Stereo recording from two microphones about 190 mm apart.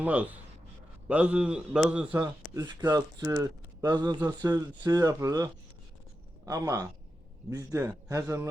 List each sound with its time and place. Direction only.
0.0 s a man's voice: 10° right (ahead or behind)